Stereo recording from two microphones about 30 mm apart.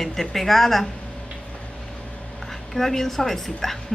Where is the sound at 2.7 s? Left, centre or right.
Centre.